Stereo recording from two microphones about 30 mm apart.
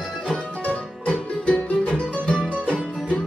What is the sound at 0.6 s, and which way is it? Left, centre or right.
Music, left.